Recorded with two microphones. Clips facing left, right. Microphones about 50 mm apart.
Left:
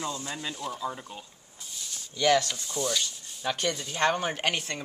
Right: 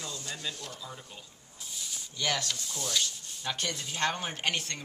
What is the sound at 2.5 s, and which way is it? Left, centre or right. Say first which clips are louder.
Rub: left 4 dB; centre.